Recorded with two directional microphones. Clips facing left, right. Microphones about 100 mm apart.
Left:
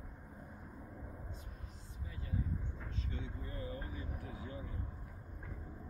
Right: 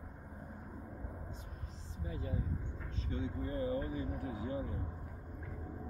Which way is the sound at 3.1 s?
35° right (ahead or behind).